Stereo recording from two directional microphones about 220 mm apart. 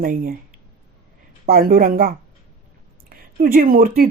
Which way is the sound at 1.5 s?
40° right (ahead or behind).